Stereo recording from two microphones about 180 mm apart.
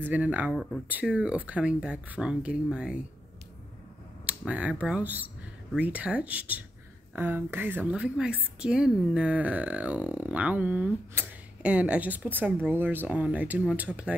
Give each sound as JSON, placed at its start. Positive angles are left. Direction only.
{"t": 0.0, "sound": "speech", "side_deg": -10}
{"t": 4.3, "sound": "speech", "side_deg": -5}